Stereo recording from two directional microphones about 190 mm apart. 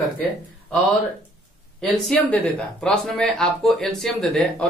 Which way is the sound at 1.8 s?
5° left (ahead or behind).